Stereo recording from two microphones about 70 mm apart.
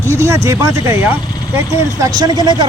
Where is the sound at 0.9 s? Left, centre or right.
Right.